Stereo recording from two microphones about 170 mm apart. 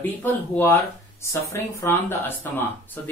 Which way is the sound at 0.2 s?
10° left (ahead or behind).